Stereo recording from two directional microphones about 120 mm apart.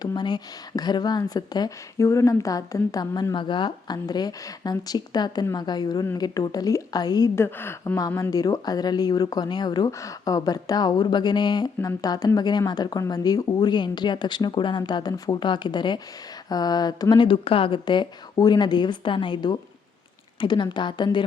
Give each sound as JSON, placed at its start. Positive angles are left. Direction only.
{"t": 0.0, "sound": "speech", "side_deg": 35}
{"t": 7.3, "sound": "a woman's voice", "side_deg": 20}
{"t": 8.3, "sound": "speech", "side_deg": 30}